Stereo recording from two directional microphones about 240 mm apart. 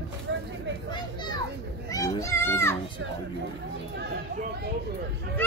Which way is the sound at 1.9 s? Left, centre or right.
Centre.